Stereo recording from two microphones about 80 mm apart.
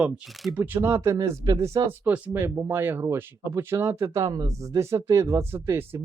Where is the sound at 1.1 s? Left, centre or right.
Right.